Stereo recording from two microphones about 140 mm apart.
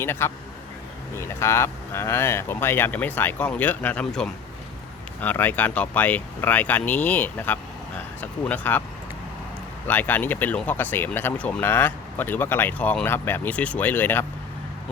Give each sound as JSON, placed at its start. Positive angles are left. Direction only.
{"t": 0.0, "sound": "speech", "side_deg": 15}
{"t": 9.8, "sound": "speech", "side_deg": 10}